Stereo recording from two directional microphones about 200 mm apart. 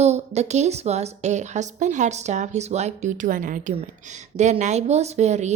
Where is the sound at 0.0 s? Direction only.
35° right (ahead or behind).